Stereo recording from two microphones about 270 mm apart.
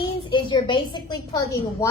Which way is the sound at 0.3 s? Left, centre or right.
Centre.